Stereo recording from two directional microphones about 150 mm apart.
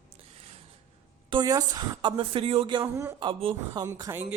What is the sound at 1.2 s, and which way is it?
Speech, 25° right (ahead or behind).